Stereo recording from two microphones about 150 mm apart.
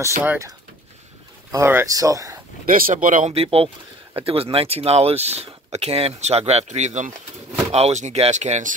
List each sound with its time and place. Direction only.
0.0 s speech: 15° right (ahead or behind)
1.5 s speech: 20° right (ahead or behind)
2.7 s speech: 60° right (ahead or behind)
3.3 s speech: 40° right (ahead or behind)